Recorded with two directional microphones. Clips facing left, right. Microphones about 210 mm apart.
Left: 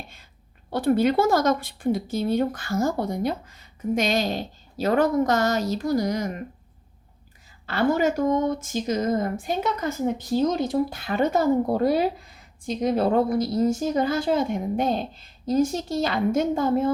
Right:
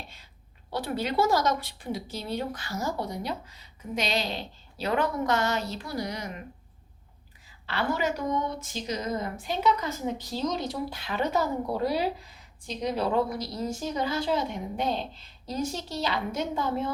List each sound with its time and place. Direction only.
0.7 s a woman's voice: 50° left (ahead or behind)
7.7 s a woman's voice: 45° left (ahead or behind)